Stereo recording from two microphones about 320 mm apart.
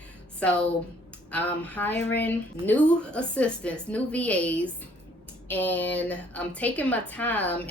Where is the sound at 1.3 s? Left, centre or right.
Centre.